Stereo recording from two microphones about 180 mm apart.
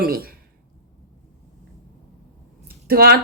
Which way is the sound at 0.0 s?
55° right (ahead or behind).